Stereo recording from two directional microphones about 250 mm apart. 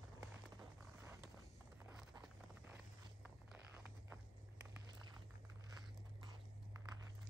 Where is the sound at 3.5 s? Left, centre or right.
Centre.